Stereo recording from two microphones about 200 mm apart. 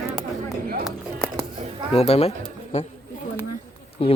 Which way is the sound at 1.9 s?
30° left (ahead or behind).